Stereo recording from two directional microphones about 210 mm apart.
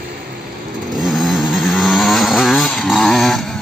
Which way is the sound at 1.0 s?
Centre (ahead or behind).